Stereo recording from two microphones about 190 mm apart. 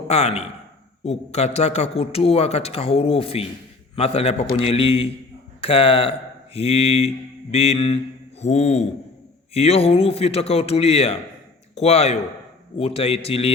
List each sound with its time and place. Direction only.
0.1 s a man's voice: 35° left (ahead or behind)